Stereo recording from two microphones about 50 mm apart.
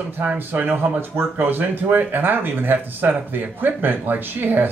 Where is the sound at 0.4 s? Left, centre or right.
Right.